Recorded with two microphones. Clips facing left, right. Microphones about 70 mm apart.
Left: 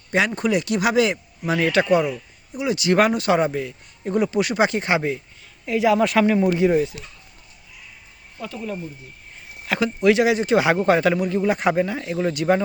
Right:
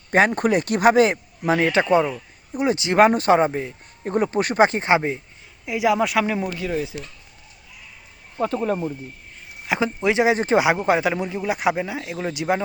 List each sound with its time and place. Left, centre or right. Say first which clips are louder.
0.3 s speech: right 1 dB; right
1.5 s speech: even; right
5.6 s speech: left 2 dB; centre
6.5 s speech: left 9 dB; left
8.4 s speech: right 8 dB; right
9.6 s speech: left 3 dB; centre
10.3 s speech: even; right
10.6 s speech: left 1 dB; centre